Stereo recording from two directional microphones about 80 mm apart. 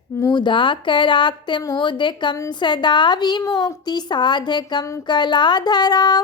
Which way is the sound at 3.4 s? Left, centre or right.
Left.